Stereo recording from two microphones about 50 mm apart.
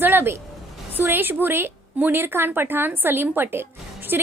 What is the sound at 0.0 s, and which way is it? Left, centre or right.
A woman's voice, right.